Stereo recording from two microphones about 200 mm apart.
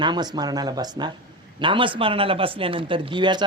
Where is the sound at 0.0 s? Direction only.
20° right (ahead or behind).